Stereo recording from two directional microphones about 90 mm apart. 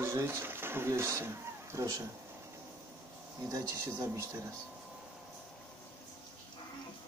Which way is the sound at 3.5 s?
35° right (ahead or behind).